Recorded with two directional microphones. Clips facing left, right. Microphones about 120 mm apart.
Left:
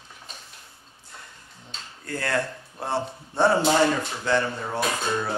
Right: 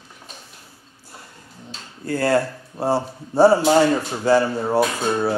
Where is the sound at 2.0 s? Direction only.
35° right (ahead or behind).